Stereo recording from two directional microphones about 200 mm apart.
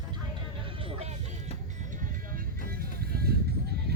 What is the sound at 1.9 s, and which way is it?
Music, 45° right (ahead or behind).